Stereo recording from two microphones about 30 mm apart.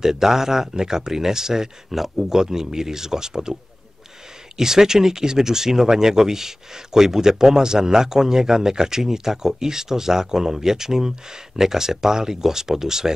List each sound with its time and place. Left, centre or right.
0.0 s speech: centre
2.2 s speech: centre
4.6 s speech: centre